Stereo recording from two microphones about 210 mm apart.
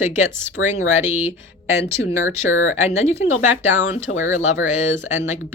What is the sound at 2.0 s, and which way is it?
Speech, 65° left (ahead or behind).